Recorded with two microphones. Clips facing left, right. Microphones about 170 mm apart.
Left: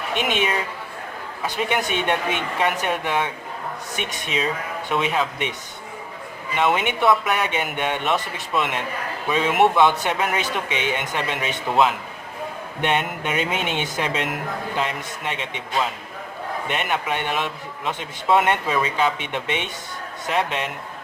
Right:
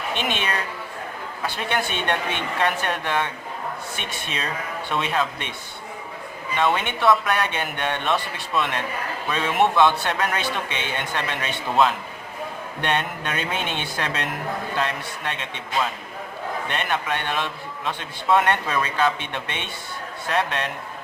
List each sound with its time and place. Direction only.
0.2 s a man's voice: 10° left (ahead or behind)
6.6 s a man's voice: 15° left (ahead or behind)